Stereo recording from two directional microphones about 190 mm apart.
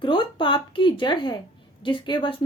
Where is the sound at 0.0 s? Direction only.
25° left (ahead or behind).